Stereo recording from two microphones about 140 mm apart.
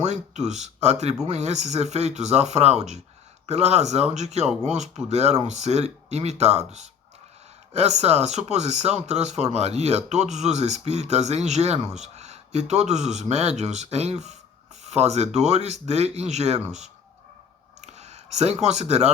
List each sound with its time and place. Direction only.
0.0 s speech: 55° right (ahead or behind)
7.7 s speech: 50° right (ahead or behind)
17.7 s a sound: 55° right (ahead or behind)